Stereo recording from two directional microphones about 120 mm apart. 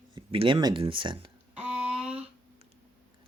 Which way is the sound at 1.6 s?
10° right (ahead or behind).